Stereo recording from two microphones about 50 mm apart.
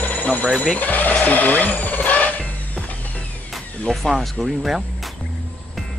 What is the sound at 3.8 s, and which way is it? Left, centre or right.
Speech, centre.